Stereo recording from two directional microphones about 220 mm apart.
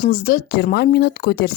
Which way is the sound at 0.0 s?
40° left (ahead or behind).